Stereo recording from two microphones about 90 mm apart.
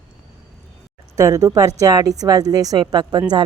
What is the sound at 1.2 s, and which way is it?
A woman's voice, 35° right (ahead or behind).